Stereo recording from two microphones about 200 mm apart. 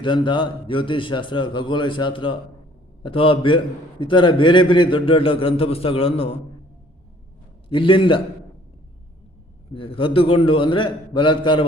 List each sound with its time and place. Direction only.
0.0 s a man's voice: 25° left (ahead or behind)
7.7 s a man's voice: 25° left (ahead or behind)
9.7 s a man's voice: 25° left (ahead or behind)